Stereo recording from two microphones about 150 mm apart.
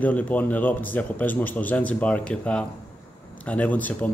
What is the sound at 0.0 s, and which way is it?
Speech, 10° left (ahead or behind).